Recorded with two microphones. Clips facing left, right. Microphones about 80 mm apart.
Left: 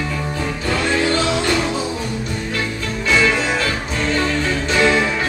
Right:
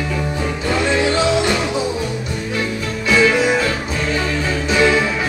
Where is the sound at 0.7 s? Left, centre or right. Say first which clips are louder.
Right 1 dB; centre.